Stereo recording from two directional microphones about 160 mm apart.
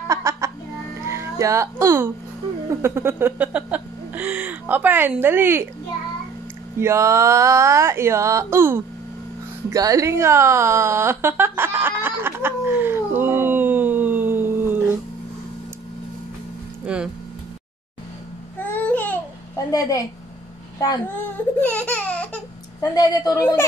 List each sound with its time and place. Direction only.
0.1 s music: 20° right (ahead or behind)
1.0 s speech: 15° right (ahead or behind)
2.7 s a sound: 15° right (ahead or behind)
6.8 s a sound: 15° right (ahead or behind)
16.8 s speech: 5° right (ahead or behind)
18.6 s babbling: 10° left (ahead or behind)
19.7 s speech: 20° left (ahead or behind)
21.5 s laughter: 10° left (ahead or behind)
22.8 s speech: 25° left (ahead or behind)